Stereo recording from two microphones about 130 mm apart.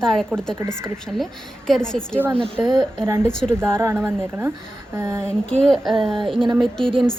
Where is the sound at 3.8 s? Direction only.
20° right (ahead or behind).